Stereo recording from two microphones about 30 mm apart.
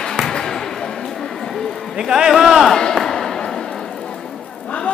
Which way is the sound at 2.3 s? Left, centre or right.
Centre.